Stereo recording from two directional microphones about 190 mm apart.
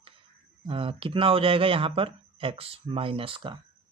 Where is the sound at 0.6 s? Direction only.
30° right (ahead or behind).